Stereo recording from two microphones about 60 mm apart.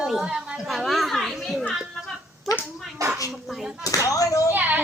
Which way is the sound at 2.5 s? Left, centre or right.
Left.